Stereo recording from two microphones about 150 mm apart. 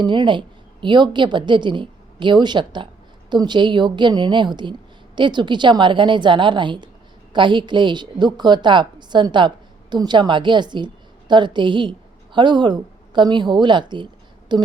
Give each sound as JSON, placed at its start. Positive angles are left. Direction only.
{"t": 0.0, "sound": "a woman's voice", "side_deg": -30}